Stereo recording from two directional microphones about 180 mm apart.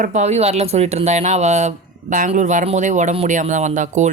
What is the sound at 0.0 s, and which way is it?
Speech, 40° right (ahead or behind).